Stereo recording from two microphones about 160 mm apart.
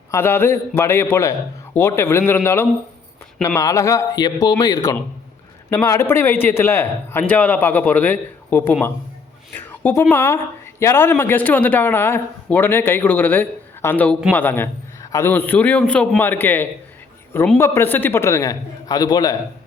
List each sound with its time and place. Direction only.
0.1 s a man's voice: 15° left (ahead or behind)